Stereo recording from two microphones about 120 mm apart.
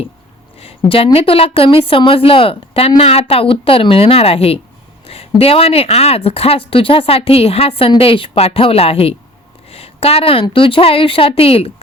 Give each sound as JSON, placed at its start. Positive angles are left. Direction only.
{"t": 0.9, "sound": "speech", "side_deg": 50}
{"t": 9.6, "sound": "a sound", "side_deg": 55}
{"t": 10.4, "sound": "speech", "side_deg": 45}